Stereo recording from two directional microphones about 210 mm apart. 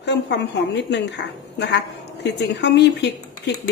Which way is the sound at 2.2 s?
55° left (ahead or behind).